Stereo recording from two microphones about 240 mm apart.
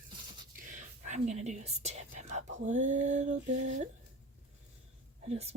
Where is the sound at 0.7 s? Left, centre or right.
Right.